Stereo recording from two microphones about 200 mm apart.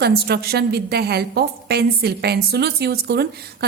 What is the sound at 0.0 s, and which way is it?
A woman's voice, 55° right (ahead or behind).